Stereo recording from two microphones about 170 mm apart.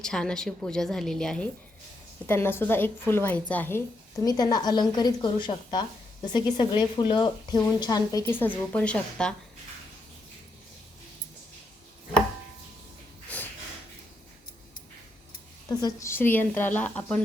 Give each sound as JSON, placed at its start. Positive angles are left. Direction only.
{"t": 0.0, "sound": "a woman's voice", "side_deg": 5}
{"t": 13.3, "sound": "snort", "side_deg": 10}
{"t": 15.8, "sound": "a woman's voice", "side_deg": 15}